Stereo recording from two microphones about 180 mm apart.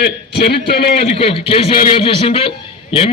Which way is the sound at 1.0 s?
30° left (ahead or behind).